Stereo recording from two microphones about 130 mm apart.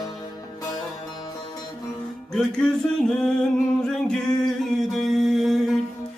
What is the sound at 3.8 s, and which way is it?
Music, 5° left (ahead or behind).